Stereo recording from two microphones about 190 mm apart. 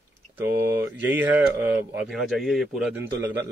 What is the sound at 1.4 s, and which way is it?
A man's voice, 10° right (ahead or behind).